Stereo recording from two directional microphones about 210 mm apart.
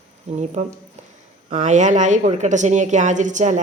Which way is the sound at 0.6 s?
30° right (ahead or behind).